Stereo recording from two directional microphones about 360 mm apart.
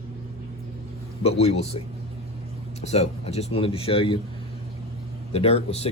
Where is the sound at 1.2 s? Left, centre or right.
Centre.